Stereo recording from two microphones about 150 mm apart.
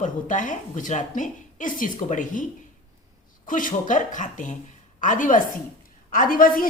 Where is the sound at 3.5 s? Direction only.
60° left (ahead or behind).